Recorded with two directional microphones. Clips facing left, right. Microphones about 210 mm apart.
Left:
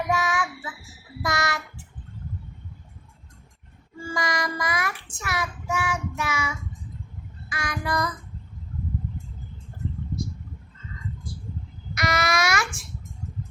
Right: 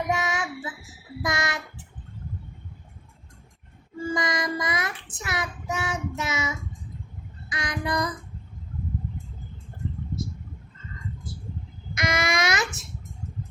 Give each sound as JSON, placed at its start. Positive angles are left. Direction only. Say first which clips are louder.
{"t": 0.1, "sound": "child singing", "louder": "left 1 dB", "side_deg": -20}
{"t": 4.0, "sound": "child singing", "louder": "right 2 dB", "side_deg": -20}
{"t": 7.5, "sound": "child singing", "louder": "even", "side_deg": -20}
{"t": 11.9, "sound": "babbling", "louder": "left 1 dB", "side_deg": -20}